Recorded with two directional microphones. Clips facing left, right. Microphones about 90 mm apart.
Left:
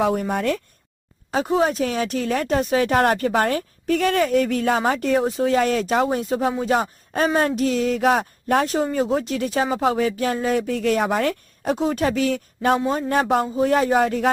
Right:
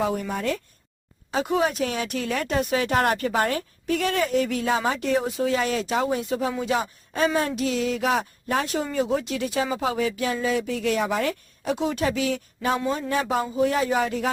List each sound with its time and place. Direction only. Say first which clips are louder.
0.0 s speech: left 5 dB; 50° left (ahead or behind)
1.5 s speech: left 4 dB; 35° left (ahead or behind); by 8.7 s 50° left (ahead or behind)
8.7 s speech: left 4 dB; 40° left (ahead or behind)